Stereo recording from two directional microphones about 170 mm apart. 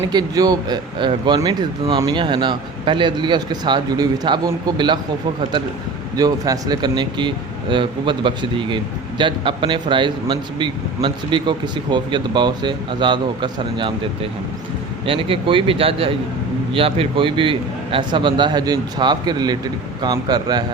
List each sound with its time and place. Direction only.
0.1 s speech: 25° right (ahead or behind)
6.1 s speech: 20° right (ahead or behind)